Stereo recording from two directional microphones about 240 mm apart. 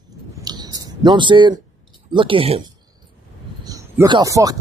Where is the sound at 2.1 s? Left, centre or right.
Right.